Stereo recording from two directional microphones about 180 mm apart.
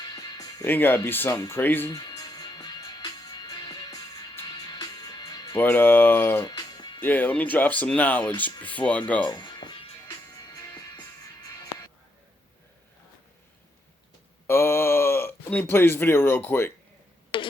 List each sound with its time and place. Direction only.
0.0 s music: 25° left (ahead or behind)
0.6 s speech: 10° left (ahead or behind)
2.0 s music: 20° left (ahead or behind)
5.6 s speech: 10° left (ahead or behind)
6.4 s music: 25° left (ahead or behind)
7.0 s speech: 10° left (ahead or behind)
9.3 s music: 25° left (ahead or behind)
14.4 s a sound: 15° left (ahead or behind)
17.3 s a sound: 30° left (ahead or behind)